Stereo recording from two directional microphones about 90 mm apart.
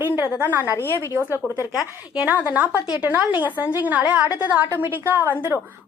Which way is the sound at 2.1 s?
15° right (ahead or behind).